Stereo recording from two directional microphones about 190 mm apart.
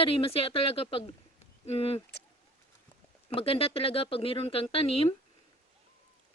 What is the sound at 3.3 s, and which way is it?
Speech, 30° left (ahead or behind).